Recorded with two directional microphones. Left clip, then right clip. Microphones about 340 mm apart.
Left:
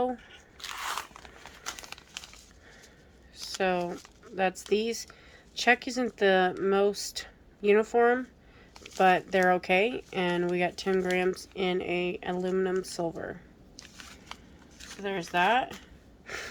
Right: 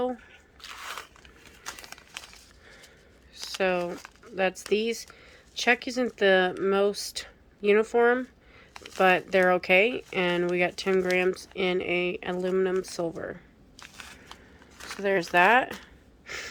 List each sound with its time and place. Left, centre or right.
0.6 s crunch: centre
1.6 s a sound: centre
3.3 s speech: centre
14.0 s crunch: centre
14.8 s speech: centre
16.2 s breathing: centre